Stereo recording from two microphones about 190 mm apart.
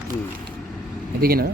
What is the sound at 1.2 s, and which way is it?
Speech, 50° right (ahead or behind).